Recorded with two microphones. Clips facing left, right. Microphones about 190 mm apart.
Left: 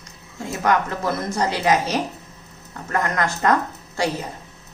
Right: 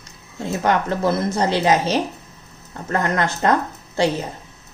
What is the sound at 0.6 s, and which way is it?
Speech, 30° right (ahead or behind).